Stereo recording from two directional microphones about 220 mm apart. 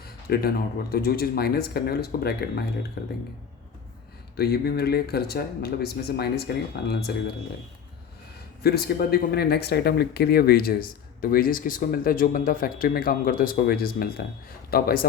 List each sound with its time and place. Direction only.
0.3 s speech: 45° left (ahead or behind)
4.4 s speech: 45° left (ahead or behind)
8.6 s speech: 45° left (ahead or behind)